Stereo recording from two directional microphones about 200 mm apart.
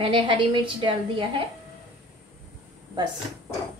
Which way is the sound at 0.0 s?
25° right (ahead or behind).